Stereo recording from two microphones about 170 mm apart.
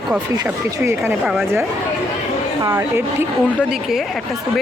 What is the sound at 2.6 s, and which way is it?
Speech, 15° right (ahead or behind).